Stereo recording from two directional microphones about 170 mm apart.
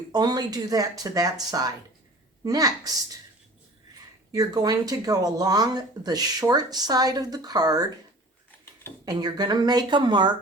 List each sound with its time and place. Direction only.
0.1 s speech: 25° right (ahead or behind)
4.3 s speech: 20° right (ahead or behind)
9.0 s speech: 25° right (ahead or behind)